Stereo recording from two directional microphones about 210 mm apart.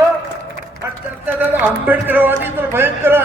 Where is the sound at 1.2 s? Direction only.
10° right (ahead or behind).